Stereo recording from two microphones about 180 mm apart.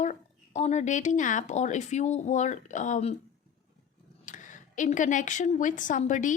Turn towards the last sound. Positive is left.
turn(degrees=45)  # may be behind; listen again after turning